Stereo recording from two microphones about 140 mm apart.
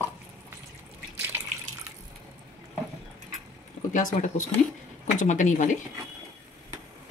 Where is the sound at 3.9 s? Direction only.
65° left (ahead or behind).